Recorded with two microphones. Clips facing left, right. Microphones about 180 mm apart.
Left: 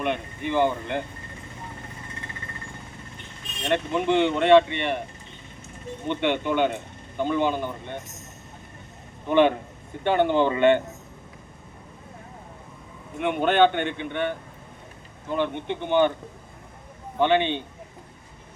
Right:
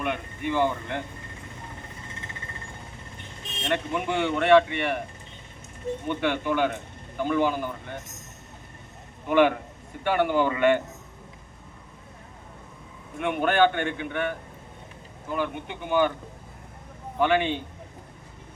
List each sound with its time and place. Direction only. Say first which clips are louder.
0.0 s speech: left 2 dB; 20° left (ahead or behind)
3.7 s speech: left 4 dB; 20° left (ahead or behind)
6.1 s speech: left 3 dB; 25° left (ahead or behind)
9.2 s speech: left 1 dB; 25° left (ahead or behind)
13.1 s speech: left 2 dB; 25° left (ahead or behind)
17.2 s speech: left 2 dB; 25° left (ahead or behind)